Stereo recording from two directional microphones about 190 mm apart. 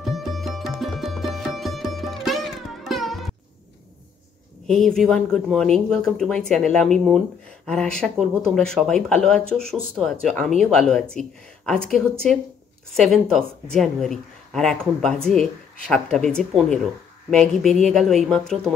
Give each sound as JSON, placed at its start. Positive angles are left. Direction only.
{"t": 0.0, "sound": "music", "side_deg": 0}
{"t": 4.6, "sound": "speech", "side_deg": 5}